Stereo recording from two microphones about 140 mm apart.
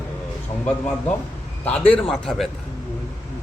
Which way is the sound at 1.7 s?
10° left (ahead or behind).